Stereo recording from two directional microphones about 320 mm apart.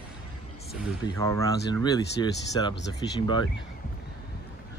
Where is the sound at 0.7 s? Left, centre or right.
Centre.